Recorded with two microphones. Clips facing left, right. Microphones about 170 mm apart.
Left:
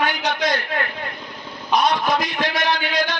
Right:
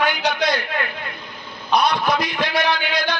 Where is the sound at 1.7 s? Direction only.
45° left (ahead or behind).